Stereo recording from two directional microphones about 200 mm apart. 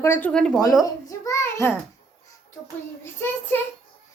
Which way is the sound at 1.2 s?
15° left (ahead or behind).